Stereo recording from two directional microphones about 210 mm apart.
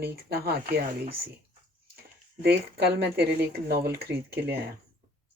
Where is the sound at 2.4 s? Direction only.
50° right (ahead or behind).